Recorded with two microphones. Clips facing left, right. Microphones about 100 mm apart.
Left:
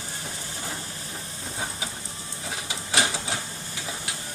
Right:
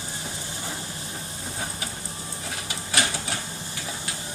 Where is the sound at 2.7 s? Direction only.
15° left (ahead or behind).